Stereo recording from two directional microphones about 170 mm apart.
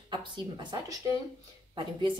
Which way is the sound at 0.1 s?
25° right (ahead or behind).